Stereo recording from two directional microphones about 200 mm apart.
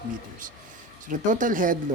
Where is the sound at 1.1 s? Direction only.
40° right (ahead or behind).